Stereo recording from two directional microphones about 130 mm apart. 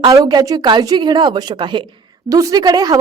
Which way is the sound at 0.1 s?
30° right (ahead or behind).